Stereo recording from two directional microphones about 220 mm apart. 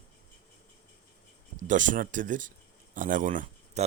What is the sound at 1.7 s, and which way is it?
A man's voice, 35° right (ahead or behind).